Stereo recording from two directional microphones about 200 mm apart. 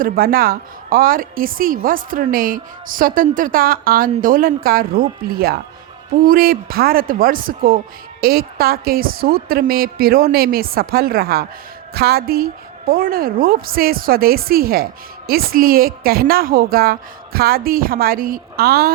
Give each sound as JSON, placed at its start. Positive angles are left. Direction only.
{"t": 0.0, "sound": "a woman's voice", "side_deg": -45}